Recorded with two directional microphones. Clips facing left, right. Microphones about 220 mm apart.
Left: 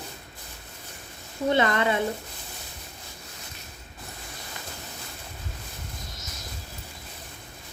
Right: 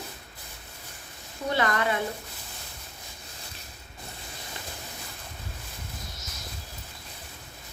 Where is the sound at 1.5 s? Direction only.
25° left (ahead or behind).